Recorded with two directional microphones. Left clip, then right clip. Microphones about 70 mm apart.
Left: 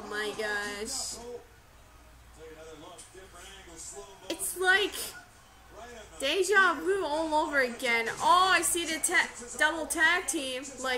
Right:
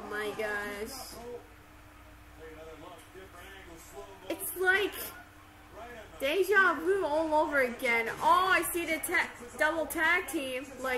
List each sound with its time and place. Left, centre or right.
0.0 s speech: centre
4.3 s speech: centre
6.1 s a woman's voice: centre